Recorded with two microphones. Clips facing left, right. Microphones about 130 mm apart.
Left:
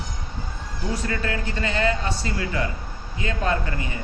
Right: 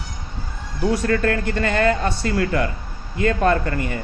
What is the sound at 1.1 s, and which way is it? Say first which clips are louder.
Speech: right 8 dB; 55° right (ahead or behind).